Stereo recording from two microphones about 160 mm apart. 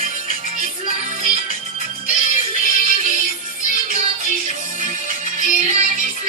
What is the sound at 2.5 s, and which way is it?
Music, 55° right (ahead or behind).